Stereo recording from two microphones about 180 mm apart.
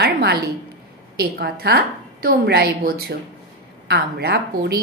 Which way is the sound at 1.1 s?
60° right (ahead or behind).